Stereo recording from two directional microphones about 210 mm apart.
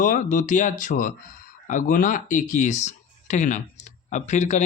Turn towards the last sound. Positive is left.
turn(degrees=35)  # may be behind; listen again after turning